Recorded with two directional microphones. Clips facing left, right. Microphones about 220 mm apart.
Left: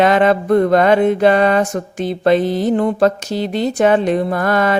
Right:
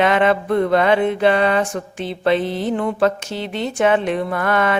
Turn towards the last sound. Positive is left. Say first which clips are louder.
# left 3 dB
turn(degrees=40)  # may be behind; listen again after turning